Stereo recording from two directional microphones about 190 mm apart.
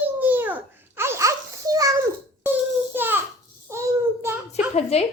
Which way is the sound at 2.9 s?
10° right (ahead or behind).